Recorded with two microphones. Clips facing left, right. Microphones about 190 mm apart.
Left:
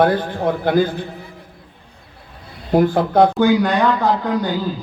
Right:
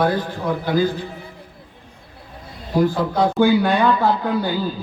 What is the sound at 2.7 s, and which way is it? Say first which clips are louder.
Speech: left 4 dB; 55° left (ahead or behind).